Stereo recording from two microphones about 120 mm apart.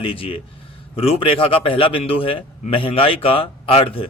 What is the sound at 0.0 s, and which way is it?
A man's voice, 50° left (ahead or behind).